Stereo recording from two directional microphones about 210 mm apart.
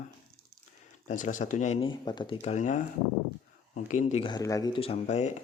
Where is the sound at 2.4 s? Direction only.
35° left (ahead or behind).